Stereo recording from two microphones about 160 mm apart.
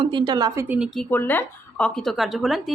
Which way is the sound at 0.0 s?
30° right (ahead or behind).